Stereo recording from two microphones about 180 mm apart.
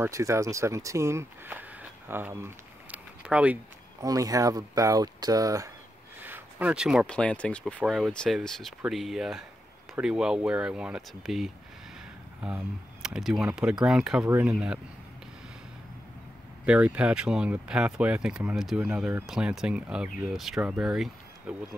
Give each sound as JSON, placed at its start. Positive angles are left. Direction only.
{"t": 0.0, "sound": "speech", "side_deg": -15}
{"t": 4.0, "sound": "speech", "side_deg": -20}
{"t": 16.6, "sound": "speech", "side_deg": -5}